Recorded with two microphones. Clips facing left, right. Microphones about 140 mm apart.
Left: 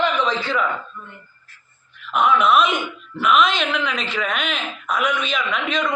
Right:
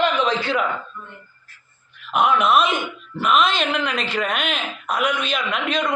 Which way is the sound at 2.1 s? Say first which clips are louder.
Left 1 dB; 5° right (ahead or behind).